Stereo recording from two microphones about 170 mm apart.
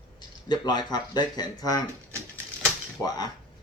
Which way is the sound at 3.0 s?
25° left (ahead or behind).